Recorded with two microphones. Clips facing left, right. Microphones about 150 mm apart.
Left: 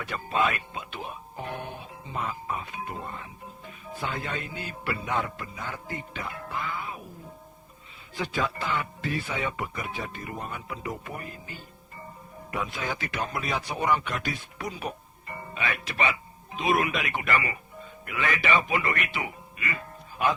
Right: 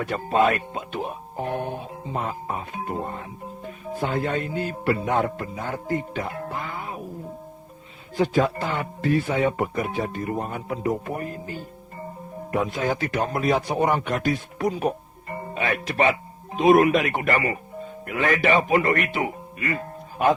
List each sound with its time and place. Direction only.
0.0 s speech: 45° right (ahead or behind)
8.1 s a man's voice: 45° right (ahead or behind)